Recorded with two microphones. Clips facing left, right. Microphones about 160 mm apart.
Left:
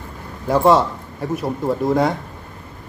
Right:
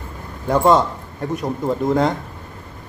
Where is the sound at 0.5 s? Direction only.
Centre (ahead or behind).